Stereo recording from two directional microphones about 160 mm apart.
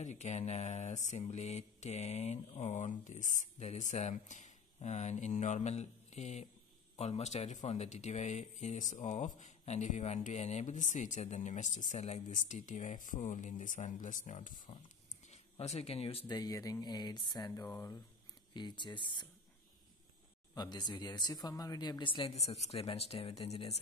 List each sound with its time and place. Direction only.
0.0 s speech: 45° left (ahead or behind)
15.6 s speech: 40° left (ahead or behind)
16.3 s speech: 25° left (ahead or behind)
18.5 s speech: 30° left (ahead or behind)
20.5 s speech: 25° left (ahead or behind)